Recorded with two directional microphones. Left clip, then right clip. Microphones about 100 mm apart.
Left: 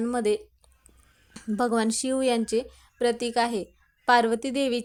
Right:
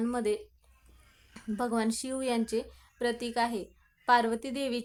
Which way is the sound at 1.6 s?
55° left (ahead or behind).